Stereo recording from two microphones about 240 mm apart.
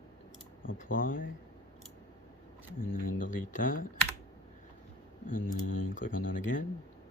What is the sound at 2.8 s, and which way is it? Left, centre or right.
Speech, left.